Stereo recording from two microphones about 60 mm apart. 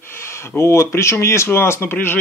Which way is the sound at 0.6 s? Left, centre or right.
Left.